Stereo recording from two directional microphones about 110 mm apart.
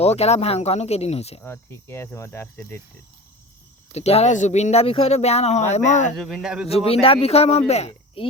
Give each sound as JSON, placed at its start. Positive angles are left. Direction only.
{"t": 0.0, "sound": "speech", "side_deg": 75}
{"t": 1.5, "sound": "cricket", "side_deg": 25}
{"t": 3.9, "sound": "speech", "side_deg": 75}
{"t": 6.1, "sound": "speech", "side_deg": 0}
{"t": 6.7, "sound": "speech", "side_deg": 65}